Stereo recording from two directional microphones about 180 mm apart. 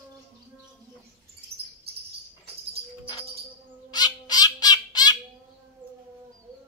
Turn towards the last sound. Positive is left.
turn(degrees=20)  # may be behind; listen again after turning